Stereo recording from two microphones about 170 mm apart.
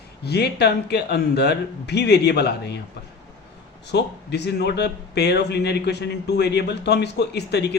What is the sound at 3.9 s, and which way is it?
A man's voice, 85° left.